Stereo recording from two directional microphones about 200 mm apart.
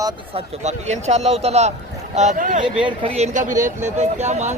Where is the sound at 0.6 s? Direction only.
35° right (ahead or behind).